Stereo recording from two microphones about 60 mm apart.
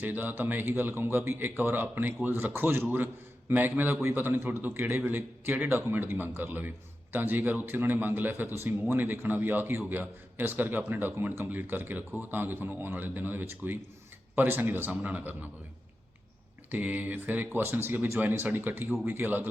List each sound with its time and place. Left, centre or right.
0.0 s a man's voice: right
16.7 s a man's voice: right